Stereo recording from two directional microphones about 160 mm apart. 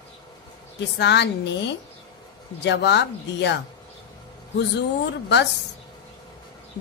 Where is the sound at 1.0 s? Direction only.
90° left.